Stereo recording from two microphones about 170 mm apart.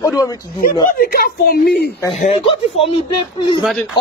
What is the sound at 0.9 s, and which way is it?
Speech, 60° left (ahead or behind).